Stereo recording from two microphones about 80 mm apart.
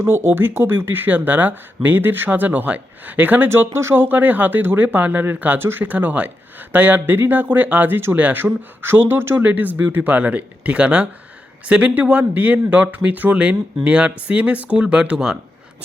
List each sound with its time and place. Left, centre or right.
0.0 s speech: right
3.5 s speech: right; by 15.4 s centre